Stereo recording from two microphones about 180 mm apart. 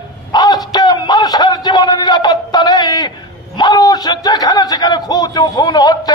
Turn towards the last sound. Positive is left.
turn(degrees=20)  # may be behind; listen again after turning